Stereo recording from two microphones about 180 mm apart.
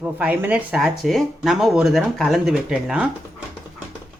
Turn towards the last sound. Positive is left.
turn(degrees=-5)  # may be behind; listen again after turning